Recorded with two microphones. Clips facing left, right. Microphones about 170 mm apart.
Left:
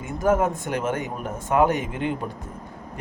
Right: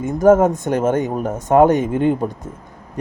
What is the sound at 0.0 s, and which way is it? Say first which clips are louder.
Speech: right 9 dB; 45° right (ahead or behind).